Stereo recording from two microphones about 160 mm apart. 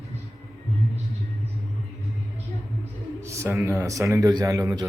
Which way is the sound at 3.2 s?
15° right (ahead or behind).